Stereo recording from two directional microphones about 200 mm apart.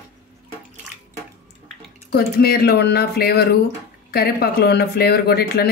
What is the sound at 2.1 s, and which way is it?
A woman's voice, 50° left (ahead or behind).